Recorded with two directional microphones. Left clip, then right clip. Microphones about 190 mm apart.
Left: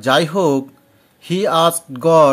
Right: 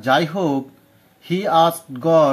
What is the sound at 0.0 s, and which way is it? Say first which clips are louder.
Speech: left 3 dB; 35° left (ahead or behind).